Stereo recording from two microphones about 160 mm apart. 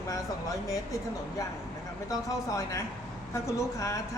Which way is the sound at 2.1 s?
20° left (ahead or behind).